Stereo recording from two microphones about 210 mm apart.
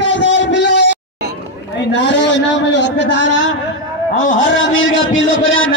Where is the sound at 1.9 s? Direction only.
55° left (ahead or behind).